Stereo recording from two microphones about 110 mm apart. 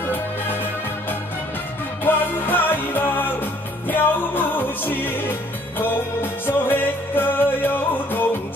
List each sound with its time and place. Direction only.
2.0 s music: 20° left (ahead or behind)
6.4 s music: 20° left (ahead or behind)